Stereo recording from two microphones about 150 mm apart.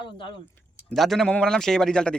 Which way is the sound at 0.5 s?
Centre (ahead or behind).